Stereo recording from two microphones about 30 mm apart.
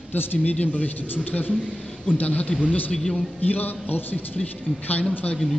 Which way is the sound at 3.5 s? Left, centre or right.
Left.